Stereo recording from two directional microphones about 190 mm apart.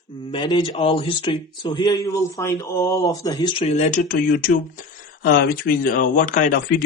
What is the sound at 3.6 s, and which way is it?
Speech, 35° left (ahead or behind).